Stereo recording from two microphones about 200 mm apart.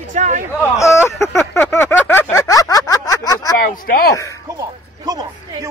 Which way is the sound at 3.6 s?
45° left (ahead or behind).